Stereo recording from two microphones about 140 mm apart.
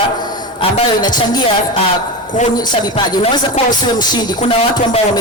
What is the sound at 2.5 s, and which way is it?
Music, 30° left (ahead or behind).